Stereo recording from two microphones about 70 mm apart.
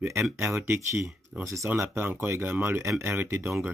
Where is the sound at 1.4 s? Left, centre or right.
Right.